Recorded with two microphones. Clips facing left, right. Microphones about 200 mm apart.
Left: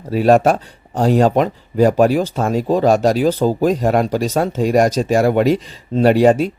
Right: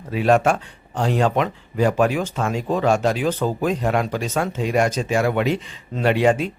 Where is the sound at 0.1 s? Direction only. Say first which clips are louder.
Left 5 dB; 40° left (ahead or behind).